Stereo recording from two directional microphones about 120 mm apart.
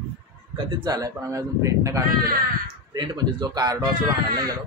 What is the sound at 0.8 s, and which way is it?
Speech, 30° right (ahead or behind).